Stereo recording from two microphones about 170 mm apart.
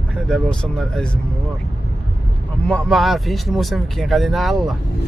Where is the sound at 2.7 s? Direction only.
Centre (ahead or behind).